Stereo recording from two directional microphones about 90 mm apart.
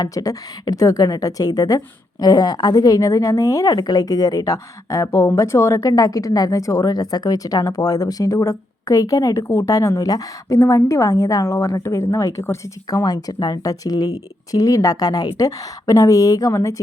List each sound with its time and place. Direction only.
0.0 s a woman's voice: 40° left (ahead or behind)
13.1 s a woman's voice: 45° left (ahead or behind)